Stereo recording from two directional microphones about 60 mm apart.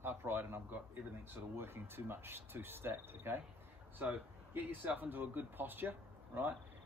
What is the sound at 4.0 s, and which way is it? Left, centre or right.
Speech, right.